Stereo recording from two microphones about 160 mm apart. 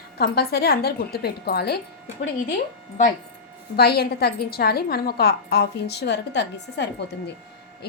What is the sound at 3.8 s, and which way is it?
A woman's voice, 90° left.